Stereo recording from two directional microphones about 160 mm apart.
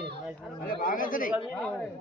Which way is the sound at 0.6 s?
60° left (ahead or behind).